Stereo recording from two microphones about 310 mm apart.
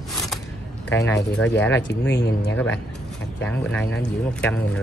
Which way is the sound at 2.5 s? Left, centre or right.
Centre.